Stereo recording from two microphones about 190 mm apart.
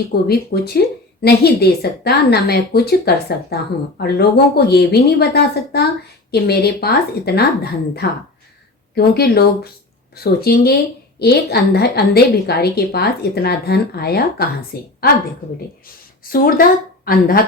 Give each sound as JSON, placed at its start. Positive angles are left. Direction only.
{"t": 0.1, "sound": "speech", "side_deg": 55}
{"t": 16.3, "sound": "a woman's voice", "side_deg": 50}